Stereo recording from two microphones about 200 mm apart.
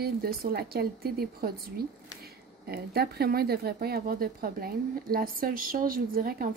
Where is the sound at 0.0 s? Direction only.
50° right (ahead or behind).